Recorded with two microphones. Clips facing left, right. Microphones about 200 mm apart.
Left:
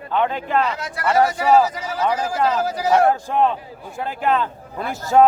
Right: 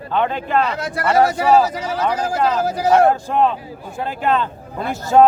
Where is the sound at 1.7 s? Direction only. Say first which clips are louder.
Right 4 dB; 70° right (ahead or behind).